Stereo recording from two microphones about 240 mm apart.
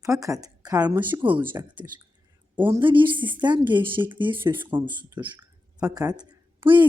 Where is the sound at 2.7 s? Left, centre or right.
Centre.